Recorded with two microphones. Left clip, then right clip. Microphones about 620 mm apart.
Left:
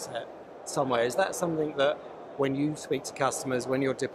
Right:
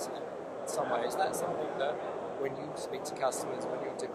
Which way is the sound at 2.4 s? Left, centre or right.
Left.